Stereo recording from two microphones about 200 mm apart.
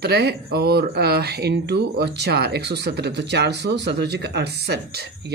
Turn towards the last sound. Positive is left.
turn(degrees=-55)  # may be behind; listen again after turning